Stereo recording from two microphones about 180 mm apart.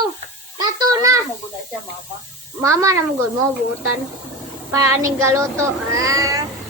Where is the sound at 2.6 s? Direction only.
15° right (ahead or behind).